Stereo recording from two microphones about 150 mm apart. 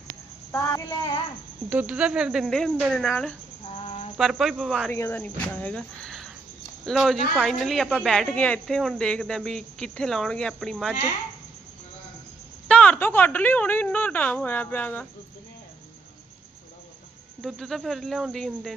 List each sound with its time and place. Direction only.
0.5 s child singing: 20° left (ahead or behind)
1.7 s speech: 10° right (ahead or behind)
3.7 s a sound: 40° left (ahead or behind)
4.2 s speech: centre (ahead or behind)
4.9 s a woman's voice: 15° left (ahead or behind)
12.6 s a woman's voice: 10° left (ahead or behind)
17.4 s speech: centre (ahead or behind)